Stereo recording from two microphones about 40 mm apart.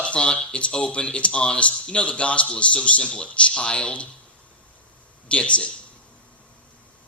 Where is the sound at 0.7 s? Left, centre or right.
Left.